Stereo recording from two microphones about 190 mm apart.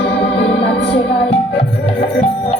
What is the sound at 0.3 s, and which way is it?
Organ, 65° left (ahead or behind).